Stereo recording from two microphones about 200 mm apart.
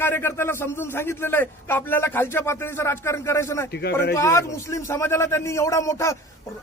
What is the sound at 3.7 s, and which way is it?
Speech, 55° left (ahead or behind).